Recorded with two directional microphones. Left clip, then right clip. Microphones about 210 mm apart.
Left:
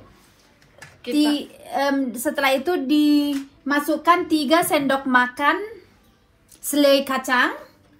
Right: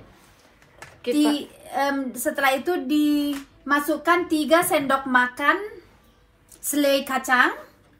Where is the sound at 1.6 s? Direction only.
20° left (ahead or behind).